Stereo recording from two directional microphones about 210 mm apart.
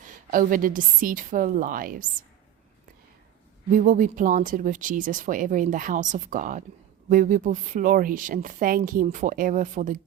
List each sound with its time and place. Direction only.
0.0 s speech: 40° right (ahead or behind)
3.7 s speech: 40° right (ahead or behind)